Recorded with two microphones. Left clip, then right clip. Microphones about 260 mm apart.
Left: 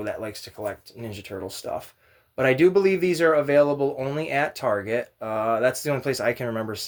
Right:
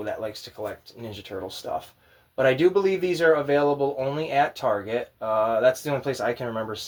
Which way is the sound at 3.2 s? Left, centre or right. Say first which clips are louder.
Left 1 dB; left.